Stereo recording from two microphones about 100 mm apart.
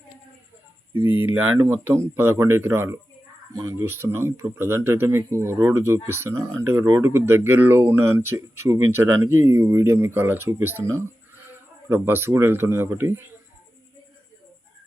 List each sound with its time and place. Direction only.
0.9 s speech: 20° right (ahead or behind)